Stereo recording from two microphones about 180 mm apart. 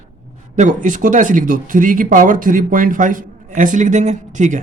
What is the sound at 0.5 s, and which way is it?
Speech, 45° right (ahead or behind).